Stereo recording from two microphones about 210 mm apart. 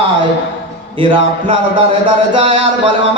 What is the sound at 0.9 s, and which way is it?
Speech, 25° right (ahead or behind).